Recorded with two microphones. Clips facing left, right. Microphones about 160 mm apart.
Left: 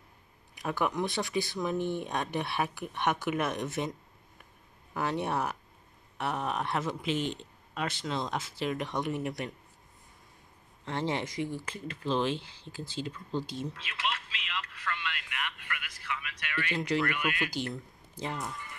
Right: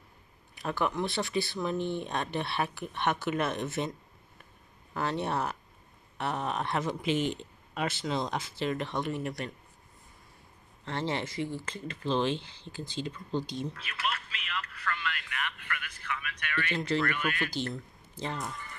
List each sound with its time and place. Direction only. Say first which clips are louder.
0.6 s speech: even; 15° left (ahead or behind)
4.9 s speech: even; 10° left (ahead or behind)
6.9 s speech: right 2 dB; 5° right (ahead or behind); by 9.5 s 15° left (ahead or behind)
10.9 s speech: left 1 dB; 15° left (ahead or behind)
14.4 s a sound: right 1 dB; 20° left (ahead or behind)
16.1 s speech: right 1 dB; 10° left (ahead or behind)